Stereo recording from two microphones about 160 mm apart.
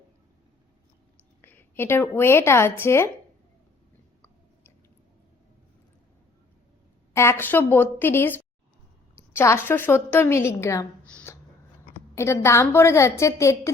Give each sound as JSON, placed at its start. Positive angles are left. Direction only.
{"t": 1.4, "sound": "a woman's voice", "side_deg": 10}
{"t": 7.1, "sound": "a woman's voice", "side_deg": 15}
{"t": 11.0, "sound": "a sound", "side_deg": 10}
{"t": 12.1, "sound": "a woman's voice", "side_deg": 15}